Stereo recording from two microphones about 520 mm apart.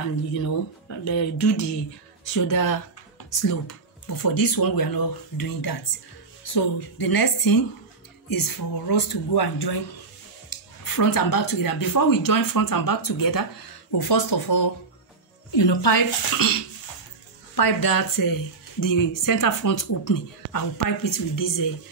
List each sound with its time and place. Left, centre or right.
0.3 s speech: left